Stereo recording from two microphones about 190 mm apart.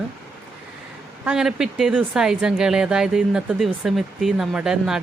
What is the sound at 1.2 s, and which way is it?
Speech, 5° right (ahead or behind).